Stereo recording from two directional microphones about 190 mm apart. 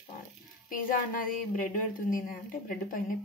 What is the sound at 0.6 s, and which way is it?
A woman's voice, 45° left (ahead or behind).